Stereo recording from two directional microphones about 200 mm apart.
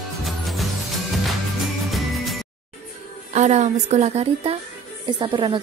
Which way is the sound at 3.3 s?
35° right (ahead or behind).